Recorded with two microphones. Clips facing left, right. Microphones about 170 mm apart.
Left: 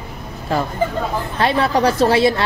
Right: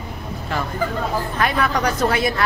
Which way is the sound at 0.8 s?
25° left (ahead or behind).